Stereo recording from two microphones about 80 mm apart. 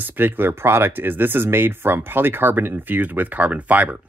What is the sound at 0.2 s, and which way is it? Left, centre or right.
Speech, right.